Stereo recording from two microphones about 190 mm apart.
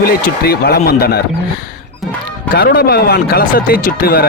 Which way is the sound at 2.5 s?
55° left (ahead or behind).